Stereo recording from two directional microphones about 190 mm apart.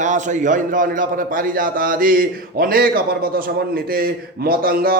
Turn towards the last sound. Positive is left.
turn(degrees=-50)  # may be behind; listen again after turning